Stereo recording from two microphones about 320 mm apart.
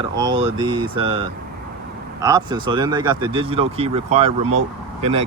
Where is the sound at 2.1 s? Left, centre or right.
Centre.